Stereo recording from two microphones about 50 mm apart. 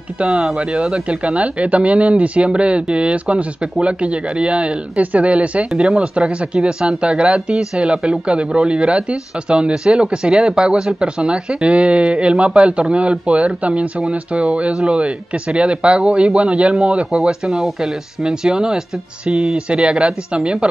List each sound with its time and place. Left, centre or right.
0.9 s speech: right